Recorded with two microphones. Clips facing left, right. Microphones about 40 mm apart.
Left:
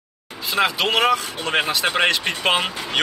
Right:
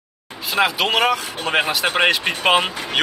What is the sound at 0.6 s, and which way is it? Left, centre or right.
Speech, centre.